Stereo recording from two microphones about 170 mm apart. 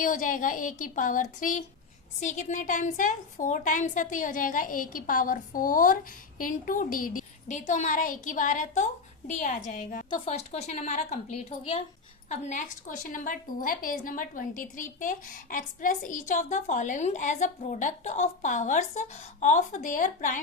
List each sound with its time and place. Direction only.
0.0 s a woman's voice: 50° left (ahead or behind)
10.2 s a woman's voice: 40° left (ahead or behind)